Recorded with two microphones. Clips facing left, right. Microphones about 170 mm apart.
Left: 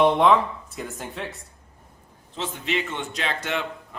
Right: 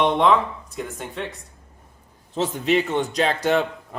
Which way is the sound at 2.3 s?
40° right (ahead or behind).